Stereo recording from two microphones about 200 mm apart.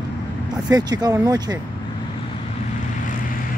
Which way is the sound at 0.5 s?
20° right (ahead or behind).